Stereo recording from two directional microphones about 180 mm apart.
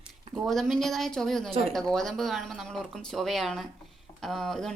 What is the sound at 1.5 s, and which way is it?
Speech, 35° right (ahead or behind).